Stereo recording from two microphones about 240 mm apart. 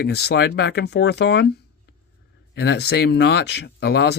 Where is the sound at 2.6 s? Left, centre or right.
Left.